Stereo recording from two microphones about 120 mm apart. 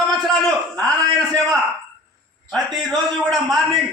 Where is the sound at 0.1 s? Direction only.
Centre (ahead or behind).